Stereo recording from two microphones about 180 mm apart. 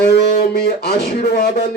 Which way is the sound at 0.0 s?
65° left (ahead or behind).